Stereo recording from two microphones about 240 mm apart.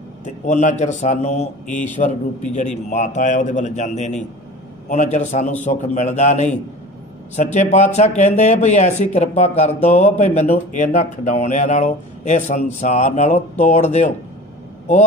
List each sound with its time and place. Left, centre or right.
0.2 s a man's voice: left